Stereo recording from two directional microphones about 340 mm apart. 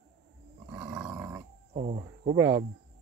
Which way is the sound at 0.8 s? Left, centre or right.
Centre.